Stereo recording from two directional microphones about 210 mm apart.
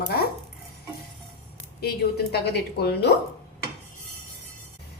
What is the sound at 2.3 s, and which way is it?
Dishes, 50° left (ahead or behind).